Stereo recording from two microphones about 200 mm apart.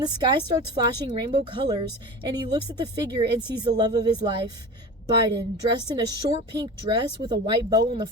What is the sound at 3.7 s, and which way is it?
Speech, 20° right (ahead or behind).